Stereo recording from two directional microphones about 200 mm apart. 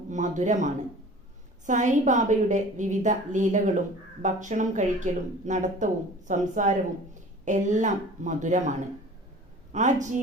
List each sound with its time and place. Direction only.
0.1 s a woman's voice: 40° right (ahead or behind)
9.7 s a woman's voice: 40° right (ahead or behind)